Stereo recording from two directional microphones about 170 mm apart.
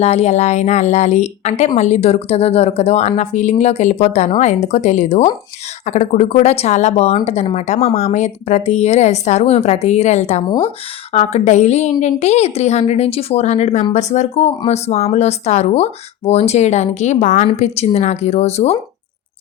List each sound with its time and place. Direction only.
0.0 s speech: 40° left (ahead or behind)